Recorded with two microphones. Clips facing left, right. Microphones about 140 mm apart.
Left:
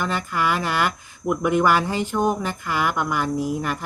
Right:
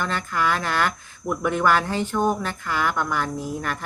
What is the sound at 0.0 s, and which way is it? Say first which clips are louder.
Speech: left 1 dB; 10° left (ahead or behind).